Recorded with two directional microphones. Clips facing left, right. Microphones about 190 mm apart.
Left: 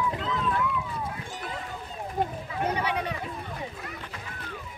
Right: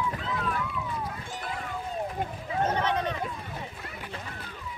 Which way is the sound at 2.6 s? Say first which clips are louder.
Right 1 dB; 10° left (ahead or behind).